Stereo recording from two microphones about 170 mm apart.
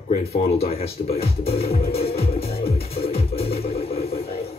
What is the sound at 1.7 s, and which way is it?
Music, 35° left (ahead or behind).